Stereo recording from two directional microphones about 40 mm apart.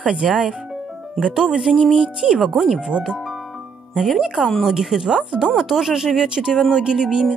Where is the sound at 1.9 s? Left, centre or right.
Right.